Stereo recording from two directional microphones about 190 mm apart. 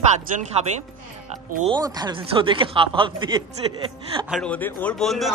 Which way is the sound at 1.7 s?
20° right (ahead or behind).